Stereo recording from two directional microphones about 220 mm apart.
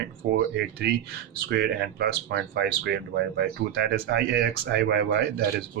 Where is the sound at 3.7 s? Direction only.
45° right (ahead or behind).